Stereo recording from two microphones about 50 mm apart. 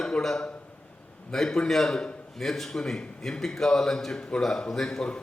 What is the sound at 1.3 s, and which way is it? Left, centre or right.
A man's voice, centre.